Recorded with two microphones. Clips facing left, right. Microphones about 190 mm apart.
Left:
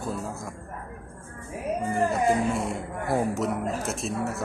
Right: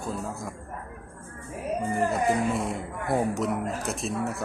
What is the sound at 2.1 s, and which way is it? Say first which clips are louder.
Speech: left 1 dB; centre (ahead or behind).